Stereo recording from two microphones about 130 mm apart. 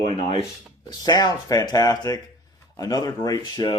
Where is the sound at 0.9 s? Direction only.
30° left (ahead or behind).